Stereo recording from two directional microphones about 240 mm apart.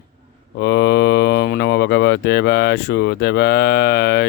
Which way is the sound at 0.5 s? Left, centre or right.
Left.